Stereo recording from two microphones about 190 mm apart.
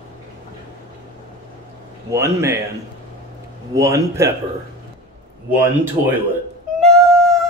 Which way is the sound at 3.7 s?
15° right (ahead or behind).